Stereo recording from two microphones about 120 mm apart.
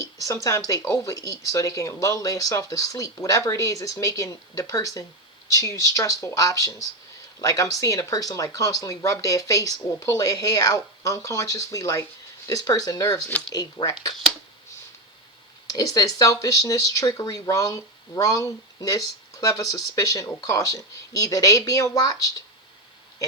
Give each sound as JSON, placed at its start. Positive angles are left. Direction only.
{"t": 0.0, "sound": "speech", "side_deg": 25}
{"t": 15.7, "sound": "speech", "side_deg": 30}